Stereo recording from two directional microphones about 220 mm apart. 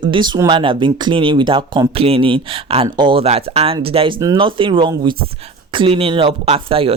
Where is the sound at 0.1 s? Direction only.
20° right (ahead or behind).